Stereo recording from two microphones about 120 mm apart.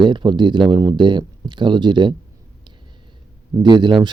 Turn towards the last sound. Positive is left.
turn(degrees=-40)  # may be behind; listen again after turning